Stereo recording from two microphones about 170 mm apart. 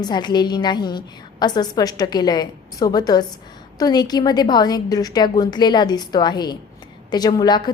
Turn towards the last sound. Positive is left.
turn(degrees=25)  # may be behind; listen again after turning